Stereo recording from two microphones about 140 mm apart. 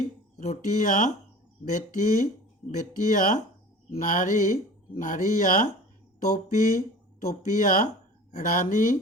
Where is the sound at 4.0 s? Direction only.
70° left (ahead or behind).